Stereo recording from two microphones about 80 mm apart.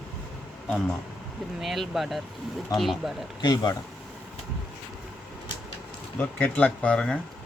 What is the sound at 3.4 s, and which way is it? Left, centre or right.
Speech, left.